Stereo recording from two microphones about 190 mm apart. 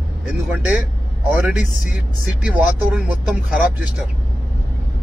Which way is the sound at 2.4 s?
5° right (ahead or behind).